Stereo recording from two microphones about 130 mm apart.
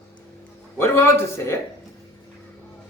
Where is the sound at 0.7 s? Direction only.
20° left (ahead or behind).